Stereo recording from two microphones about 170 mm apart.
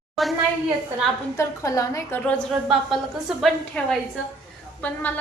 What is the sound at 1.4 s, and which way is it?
Speech, 20° left (ahead or behind).